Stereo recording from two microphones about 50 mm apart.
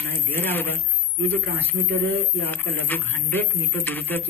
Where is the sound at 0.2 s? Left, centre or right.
Left.